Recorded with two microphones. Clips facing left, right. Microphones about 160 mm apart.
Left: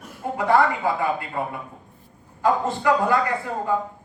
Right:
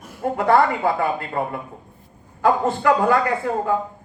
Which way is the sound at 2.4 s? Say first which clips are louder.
Right 3 dB; 55° right (ahead or behind).